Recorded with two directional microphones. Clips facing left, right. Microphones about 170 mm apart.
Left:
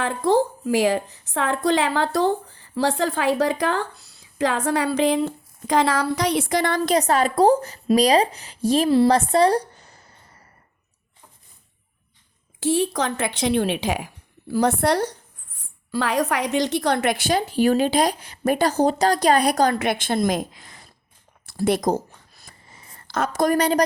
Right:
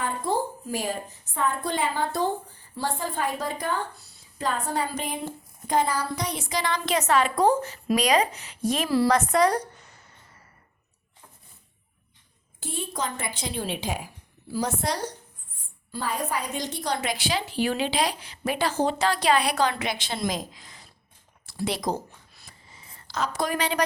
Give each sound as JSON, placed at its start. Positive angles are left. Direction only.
{"t": 0.0, "sound": "a woman's voice", "side_deg": 90}
{"t": 12.5, "sound": "speech", "side_deg": 90}
{"t": 15.9, "sound": "a woman's voice", "side_deg": 85}
{"t": 21.4, "sound": "a sound", "side_deg": 50}